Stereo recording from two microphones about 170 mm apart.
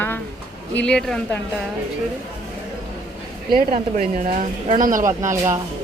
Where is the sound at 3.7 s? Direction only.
45° right (ahead or behind).